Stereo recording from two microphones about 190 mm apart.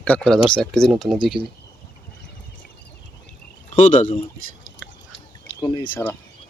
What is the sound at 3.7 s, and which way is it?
Speech, 40° left (ahead or behind).